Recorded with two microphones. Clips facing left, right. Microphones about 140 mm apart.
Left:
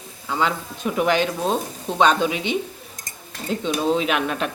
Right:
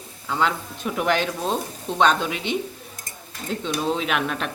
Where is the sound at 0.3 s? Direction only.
Centre (ahead or behind).